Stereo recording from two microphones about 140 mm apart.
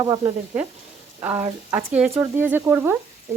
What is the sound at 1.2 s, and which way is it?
Speech, 20° right (ahead or behind).